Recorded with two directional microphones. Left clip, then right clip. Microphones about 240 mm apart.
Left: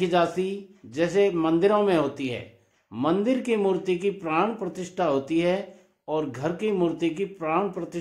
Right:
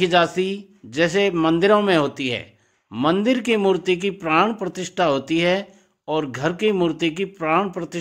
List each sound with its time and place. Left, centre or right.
0.0 s speech: right